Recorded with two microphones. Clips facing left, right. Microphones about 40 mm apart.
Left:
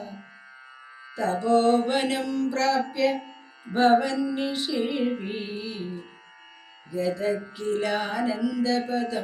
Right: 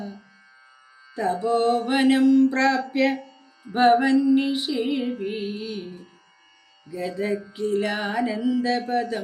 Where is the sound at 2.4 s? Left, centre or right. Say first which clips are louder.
Right 4 dB; right.